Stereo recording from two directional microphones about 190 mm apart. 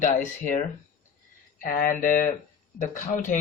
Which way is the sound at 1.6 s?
45° left (ahead or behind).